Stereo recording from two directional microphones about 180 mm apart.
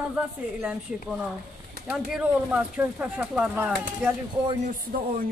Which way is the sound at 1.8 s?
5° right (ahead or behind).